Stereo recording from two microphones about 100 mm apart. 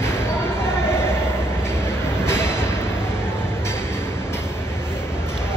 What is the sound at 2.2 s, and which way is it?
Train, 25° left (ahead or behind).